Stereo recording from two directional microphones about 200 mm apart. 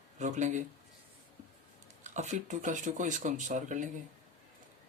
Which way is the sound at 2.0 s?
35° right (ahead or behind).